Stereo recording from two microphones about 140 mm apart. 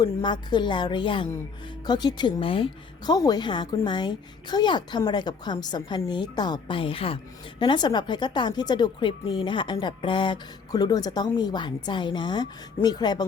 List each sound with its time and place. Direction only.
0.0 s speech: 30° left (ahead or behind)